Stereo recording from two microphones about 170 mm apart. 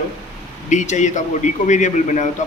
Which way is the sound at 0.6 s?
45° left (ahead or behind).